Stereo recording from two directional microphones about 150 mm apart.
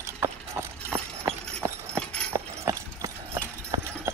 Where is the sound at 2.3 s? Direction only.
20° right (ahead or behind).